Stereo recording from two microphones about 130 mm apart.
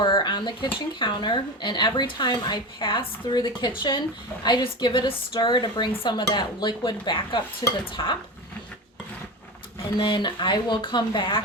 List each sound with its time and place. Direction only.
0.0 s speech: 35° left (ahead or behind)
10.0 s speech: 35° left (ahead or behind)